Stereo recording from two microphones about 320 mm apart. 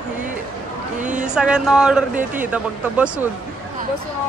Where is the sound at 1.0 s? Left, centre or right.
Right.